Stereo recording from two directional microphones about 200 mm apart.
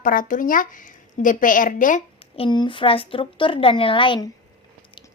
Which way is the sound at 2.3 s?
25° left (ahead or behind).